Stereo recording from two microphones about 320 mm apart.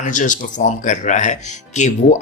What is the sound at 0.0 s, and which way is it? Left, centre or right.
Speech, left.